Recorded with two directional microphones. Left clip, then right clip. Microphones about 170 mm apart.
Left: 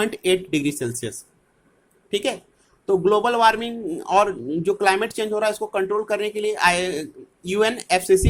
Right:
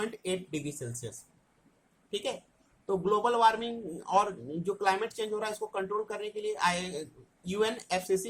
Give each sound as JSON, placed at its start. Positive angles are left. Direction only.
{"t": 0.0, "sound": "a man's voice", "side_deg": 40}